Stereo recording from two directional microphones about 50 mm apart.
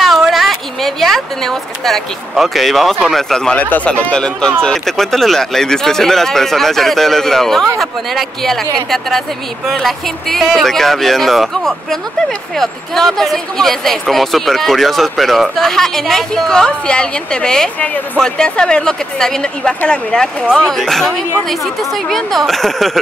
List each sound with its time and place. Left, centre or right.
0.0 s a sound: centre
2.3 s speech: centre
3.8 s speech: centre